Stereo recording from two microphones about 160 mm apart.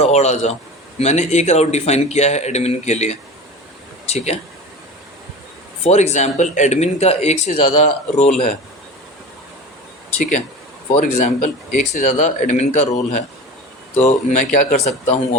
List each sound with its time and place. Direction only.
0.0 s speech: 45° left (ahead or behind)
5.8 s speech: 45° left (ahead or behind)
10.9 s speech: 50° left (ahead or behind)